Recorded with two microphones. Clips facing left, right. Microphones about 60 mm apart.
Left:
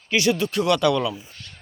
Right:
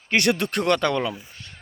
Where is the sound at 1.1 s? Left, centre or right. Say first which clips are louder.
Even; right.